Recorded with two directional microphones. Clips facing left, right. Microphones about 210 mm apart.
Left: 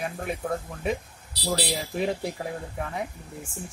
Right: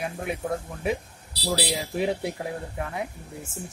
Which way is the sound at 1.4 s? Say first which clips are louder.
Right 1 dB; 5° right (ahead or behind).